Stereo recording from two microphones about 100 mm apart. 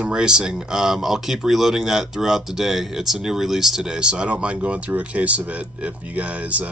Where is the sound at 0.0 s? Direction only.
10° right (ahead or behind).